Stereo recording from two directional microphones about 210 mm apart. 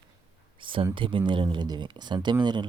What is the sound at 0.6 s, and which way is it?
Speech, 25° right (ahead or behind).